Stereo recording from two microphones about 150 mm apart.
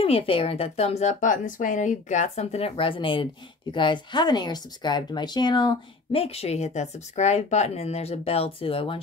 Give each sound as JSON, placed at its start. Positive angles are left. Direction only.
{"t": 0.0, "sound": "a woman's voice", "side_deg": 40}